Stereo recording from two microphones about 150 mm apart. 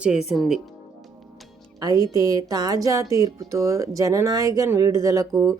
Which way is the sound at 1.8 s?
25° right (ahead or behind).